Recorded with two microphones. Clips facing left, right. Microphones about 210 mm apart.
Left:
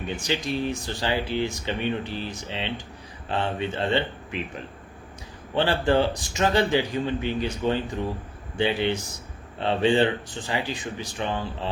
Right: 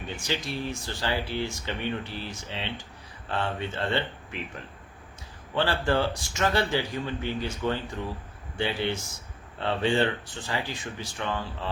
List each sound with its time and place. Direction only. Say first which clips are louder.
0.1 s speech: left 4 dB; 20° left (ahead or behind)